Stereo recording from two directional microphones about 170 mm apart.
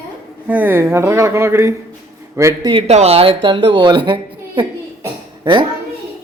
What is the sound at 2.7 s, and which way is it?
Speech, 35° right (ahead or behind).